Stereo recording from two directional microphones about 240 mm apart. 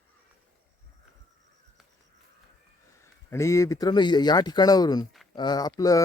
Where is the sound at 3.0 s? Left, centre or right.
Centre.